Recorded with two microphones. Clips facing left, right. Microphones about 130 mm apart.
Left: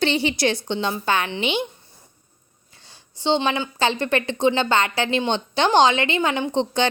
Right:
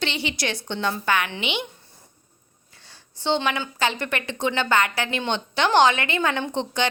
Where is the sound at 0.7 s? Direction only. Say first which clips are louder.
Left 2 dB; 20° left (ahead or behind); by 1.6 s 35° left (ahead or behind).